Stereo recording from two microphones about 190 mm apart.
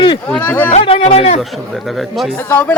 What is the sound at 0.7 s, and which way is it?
Speech, 30° left (ahead or behind).